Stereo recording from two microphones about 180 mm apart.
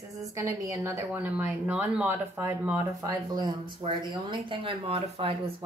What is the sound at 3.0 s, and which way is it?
Speech, 20° right (ahead or behind).